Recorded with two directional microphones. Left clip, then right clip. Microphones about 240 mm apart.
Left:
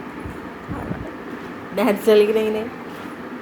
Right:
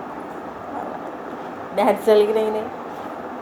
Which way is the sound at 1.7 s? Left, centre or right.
Left.